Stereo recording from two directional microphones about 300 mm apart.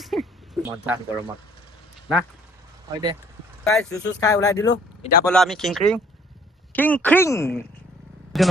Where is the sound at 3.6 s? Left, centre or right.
Centre.